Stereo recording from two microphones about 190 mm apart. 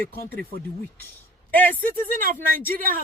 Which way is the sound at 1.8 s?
45° right (ahead or behind).